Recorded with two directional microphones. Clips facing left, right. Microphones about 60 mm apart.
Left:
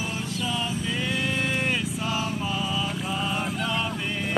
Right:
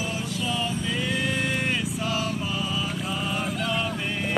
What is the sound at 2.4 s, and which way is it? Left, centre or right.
Vehicle, centre.